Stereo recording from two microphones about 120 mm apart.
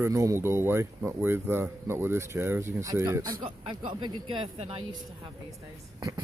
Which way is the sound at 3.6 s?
45° right (ahead or behind).